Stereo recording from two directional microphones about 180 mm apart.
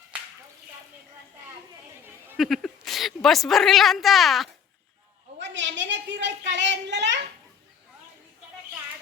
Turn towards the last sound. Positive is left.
turn(degrees=-75)  # may be behind; listen again after turning